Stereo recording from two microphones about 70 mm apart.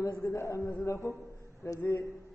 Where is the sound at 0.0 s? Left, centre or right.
Left.